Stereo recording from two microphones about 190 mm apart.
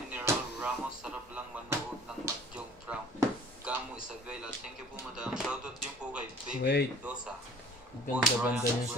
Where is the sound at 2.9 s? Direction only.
5° right (ahead or behind).